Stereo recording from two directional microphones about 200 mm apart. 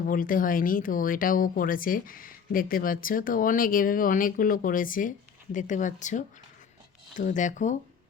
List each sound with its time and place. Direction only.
0.0 s speech: 45° left (ahead or behind)